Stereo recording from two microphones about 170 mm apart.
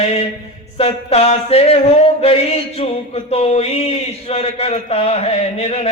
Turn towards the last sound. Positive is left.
turn(degrees=40)  # may be behind; listen again after turning